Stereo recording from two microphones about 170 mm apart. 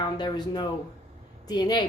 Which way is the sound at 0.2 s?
25° left (ahead or behind).